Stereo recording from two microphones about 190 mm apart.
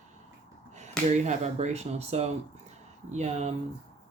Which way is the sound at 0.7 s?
35° right (ahead or behind).